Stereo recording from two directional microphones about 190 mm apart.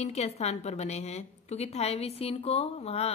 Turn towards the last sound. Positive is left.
turn(degrees=35)  # may be behind; listen again after turning